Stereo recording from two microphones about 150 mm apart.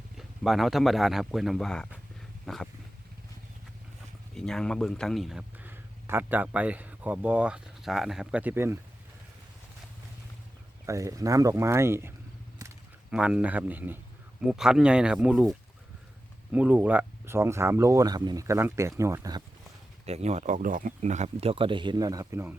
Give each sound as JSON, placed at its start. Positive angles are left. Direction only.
{"t": 0.2, "sound": "speech", "side_deg": 0}
{"t": 4.4, "sound": "a man's voice", "side_deg": 5}
{"t": 10.8, "sound": "speech", "side_deg": -20}
{"t": 13.1, "sound": "speech", "side_deg": -5}
{"t": 20.1, "sound": "speech", "side_deg": -45}
{"t": 21.5, "sound": "speech", "side_deg": -35}